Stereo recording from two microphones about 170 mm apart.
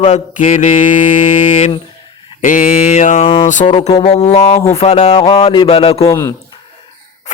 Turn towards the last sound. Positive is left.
turn(degrees=15)  # may be behind; listen again after turning